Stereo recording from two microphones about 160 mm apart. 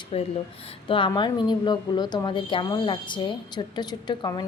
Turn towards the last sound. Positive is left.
turn(degrees=30)  # may be behind; listen again after turning